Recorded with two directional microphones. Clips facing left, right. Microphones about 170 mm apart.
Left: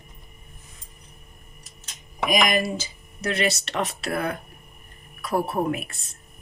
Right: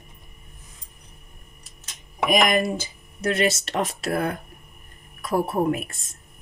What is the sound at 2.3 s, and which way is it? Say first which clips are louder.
Speech: right 2 dB; 55° right (ahead or behind).